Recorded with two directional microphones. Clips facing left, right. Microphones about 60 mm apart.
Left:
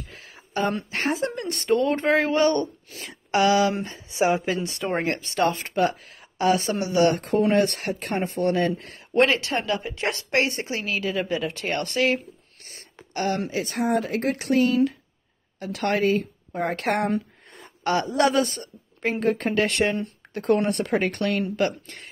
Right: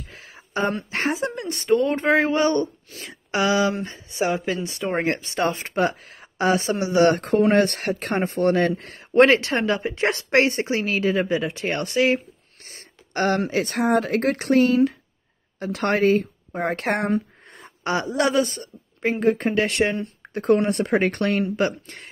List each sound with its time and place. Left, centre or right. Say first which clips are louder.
1.1 s speech: even; centre
2.9 s speech: left 3 dB; centre
5.1 s speech: even; centre
5.6 s speech: right 1 dB; right
7.0 s speech: right 3 dB; right
11.2 s speech: right 3 dB; centre
12.6 s speech: even; right
17.8 s speech: left 1 dB; centre
18.2 s a woman's voice: right 1 dB; centre
20.7 s speech: right 3 dB; right
21.5 s speech: right 1 dB; centre